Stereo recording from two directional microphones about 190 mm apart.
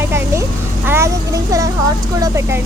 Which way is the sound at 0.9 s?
15° right (ahead or behind).